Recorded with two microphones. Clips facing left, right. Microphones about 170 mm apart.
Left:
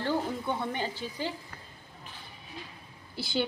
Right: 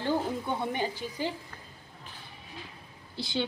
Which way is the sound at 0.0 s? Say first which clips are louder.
Right 1 dB; 15° right (ahead or behind).